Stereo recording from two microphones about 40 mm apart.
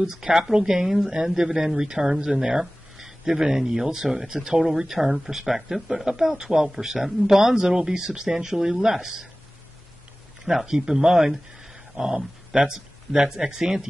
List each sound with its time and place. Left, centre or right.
0.0 s speech: centre
6.0 s speech: centre
10.4 s speech: centre